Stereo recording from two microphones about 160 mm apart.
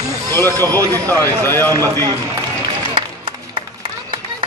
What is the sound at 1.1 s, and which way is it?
Speech, 10° left (ahead or behind).